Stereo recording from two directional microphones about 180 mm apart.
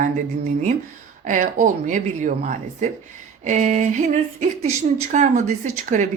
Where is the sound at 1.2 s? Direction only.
45° right (ahead or behind).